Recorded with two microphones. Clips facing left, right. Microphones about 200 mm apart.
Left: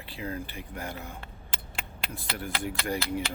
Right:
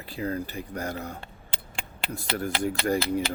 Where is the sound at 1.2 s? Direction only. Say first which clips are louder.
Right 1 dB; 30° right (ahead or behind).